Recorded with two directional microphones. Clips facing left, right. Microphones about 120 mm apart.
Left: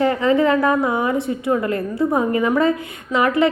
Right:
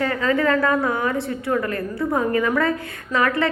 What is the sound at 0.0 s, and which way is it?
A woman's voice, 20° left (ahead or behind).